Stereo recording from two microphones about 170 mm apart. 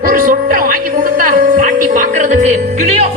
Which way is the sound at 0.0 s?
55° right (ahead or behind).